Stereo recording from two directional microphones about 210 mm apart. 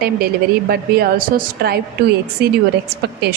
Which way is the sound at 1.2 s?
50° right (ahead or behind).